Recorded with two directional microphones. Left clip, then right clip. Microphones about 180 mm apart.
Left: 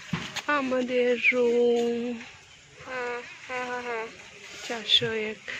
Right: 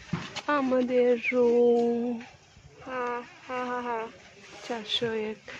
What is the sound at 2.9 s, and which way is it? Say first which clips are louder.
Speech: right 1 dB; 40° right (ahead or behind).